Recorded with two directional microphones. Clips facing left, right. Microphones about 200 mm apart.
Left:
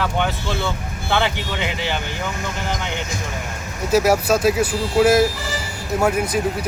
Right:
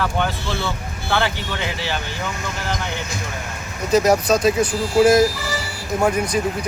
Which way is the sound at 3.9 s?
5° left (ahead or behind).